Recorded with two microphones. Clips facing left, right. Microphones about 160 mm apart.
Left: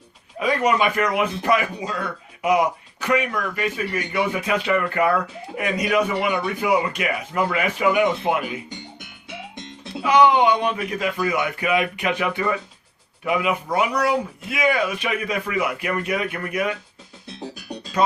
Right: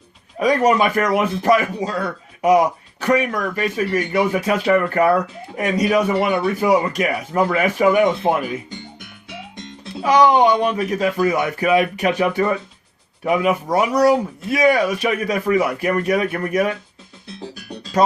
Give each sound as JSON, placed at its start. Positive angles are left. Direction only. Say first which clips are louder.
{"t": 0.3, "sound": "speech", "louder": "right 4 dB", "side_deg": -40}
{"t": 10.0, "sound": "speech", "louder": "right 2 dB", "side_deg": -40}